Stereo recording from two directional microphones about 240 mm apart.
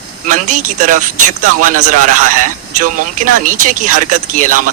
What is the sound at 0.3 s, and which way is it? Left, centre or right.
A man's voice, right.